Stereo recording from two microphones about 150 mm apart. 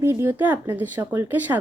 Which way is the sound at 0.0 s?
15° right (ahead or behind).